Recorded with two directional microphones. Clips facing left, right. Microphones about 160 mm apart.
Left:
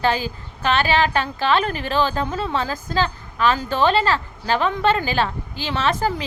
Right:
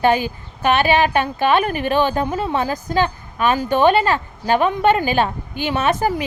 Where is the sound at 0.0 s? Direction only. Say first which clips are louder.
Right 4 dB; 15° right (ahead or behind).